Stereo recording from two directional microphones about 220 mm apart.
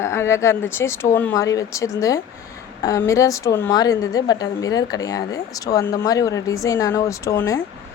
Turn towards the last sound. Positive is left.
turn(degrees=15)  # may be behind; listen again after turning